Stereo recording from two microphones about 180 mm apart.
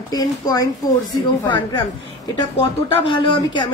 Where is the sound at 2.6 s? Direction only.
25° left (ahead or behind).